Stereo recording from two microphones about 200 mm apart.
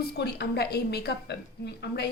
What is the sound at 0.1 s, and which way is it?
A woman's voice, 55° left (ahead or behind).